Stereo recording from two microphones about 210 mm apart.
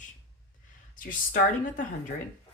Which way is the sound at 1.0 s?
40° left (ahead or behind).